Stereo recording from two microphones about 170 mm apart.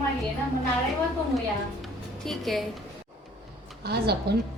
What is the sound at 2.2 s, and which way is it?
Speech, centre (ahead or behind).